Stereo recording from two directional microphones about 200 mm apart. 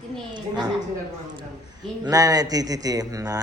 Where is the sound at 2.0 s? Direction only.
20° right (ahead or behind).